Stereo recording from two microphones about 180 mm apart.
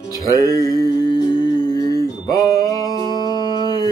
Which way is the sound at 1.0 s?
25° left (ahead or behind).